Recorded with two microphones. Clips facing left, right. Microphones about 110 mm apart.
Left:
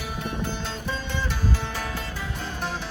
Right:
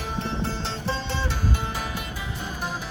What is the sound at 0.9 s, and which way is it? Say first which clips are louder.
Music: right 2 dB; 25° right (ahead or behind).